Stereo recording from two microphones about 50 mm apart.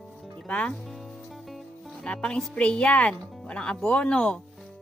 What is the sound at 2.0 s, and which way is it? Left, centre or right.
Speech, left.